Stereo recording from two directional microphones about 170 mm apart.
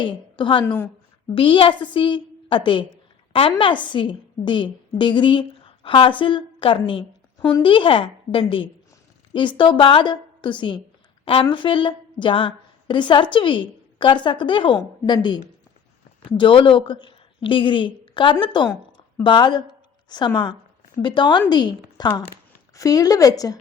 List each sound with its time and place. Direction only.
0.0 s a woman's voice: 30° left (ahead or behind)
0.6 s a woman's voice: 10° left (ahead or behind)
1.4 s a woman's voice: 30° left (ahead or behind)
16.4 s a woman's voice: 30° left (ahead or behind)